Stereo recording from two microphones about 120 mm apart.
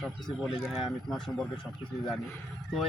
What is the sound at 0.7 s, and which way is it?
Speech, centre (ahead or behind).